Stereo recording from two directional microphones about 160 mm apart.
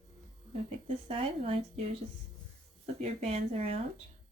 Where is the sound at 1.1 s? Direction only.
40° right (ahead or behind).